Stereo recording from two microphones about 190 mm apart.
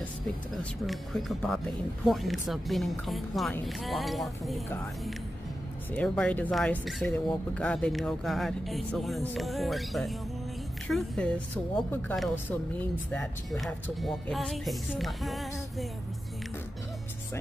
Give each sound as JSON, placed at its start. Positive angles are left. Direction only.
{"t": 0.8, "sound": "speech", "side_deg": 0}
{"t": 5.9, "sound": "speech", "side_deg": 5}